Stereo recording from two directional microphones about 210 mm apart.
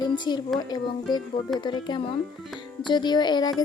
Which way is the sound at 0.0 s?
20° left (ahead or behind).